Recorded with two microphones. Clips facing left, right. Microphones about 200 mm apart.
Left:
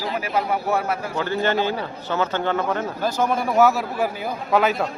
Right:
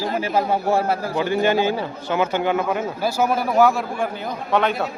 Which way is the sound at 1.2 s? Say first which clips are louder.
Right 3 dB; 15° right (ahead or behind).